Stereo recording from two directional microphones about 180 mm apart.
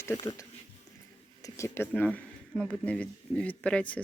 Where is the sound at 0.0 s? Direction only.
15° left (ahead or behind).